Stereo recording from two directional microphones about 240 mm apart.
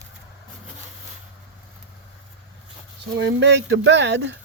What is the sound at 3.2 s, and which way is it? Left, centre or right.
Speech, right.